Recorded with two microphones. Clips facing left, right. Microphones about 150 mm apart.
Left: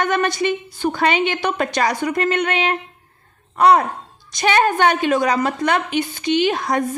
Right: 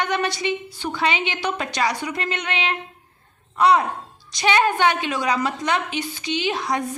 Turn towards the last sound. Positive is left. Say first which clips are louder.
# left 6 dB
turn(degrees=50)  # may be behind; listen again after turning